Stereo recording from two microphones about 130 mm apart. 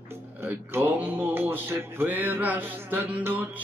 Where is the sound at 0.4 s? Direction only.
15° right (ahead or behind).